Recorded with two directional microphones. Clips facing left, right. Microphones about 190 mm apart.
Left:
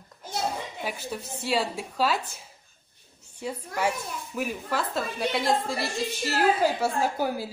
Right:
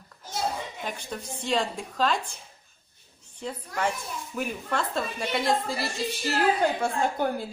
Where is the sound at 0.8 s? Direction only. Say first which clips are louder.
Left 1 dB; 5° left (ahead or behind).